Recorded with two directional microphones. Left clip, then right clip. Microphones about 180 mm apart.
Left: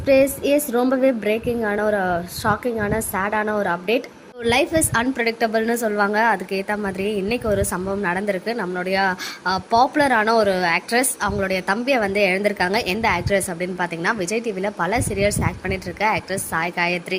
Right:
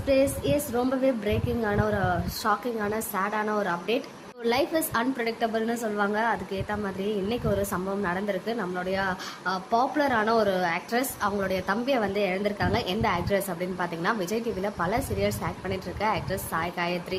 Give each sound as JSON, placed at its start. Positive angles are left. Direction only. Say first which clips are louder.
{"t": 0.0, "sound": "a woman's voice", "louder": "left 7 dB", "side_deg": 30}